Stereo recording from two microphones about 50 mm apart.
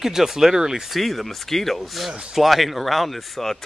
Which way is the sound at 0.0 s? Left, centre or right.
Centre.